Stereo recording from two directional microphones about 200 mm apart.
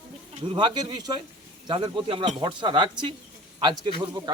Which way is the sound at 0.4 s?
20° right (ahead or behind).